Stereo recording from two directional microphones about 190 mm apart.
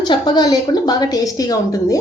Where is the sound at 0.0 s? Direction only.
25° left (ahead or behind).